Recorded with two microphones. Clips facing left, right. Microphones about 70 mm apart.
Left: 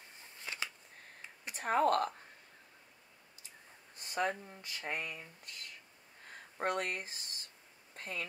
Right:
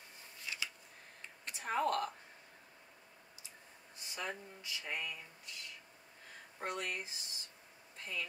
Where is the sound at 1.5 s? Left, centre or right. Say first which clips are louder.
Left 5 dB; left.